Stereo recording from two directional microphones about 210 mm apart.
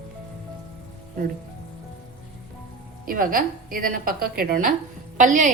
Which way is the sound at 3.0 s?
40° right (ahead or behind).